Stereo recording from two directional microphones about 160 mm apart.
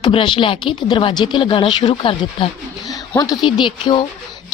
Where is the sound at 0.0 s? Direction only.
30° left (ahead or behind).